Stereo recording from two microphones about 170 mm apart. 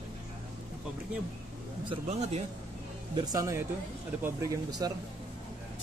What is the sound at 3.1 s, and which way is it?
Speech, 20° right (ahead or behind).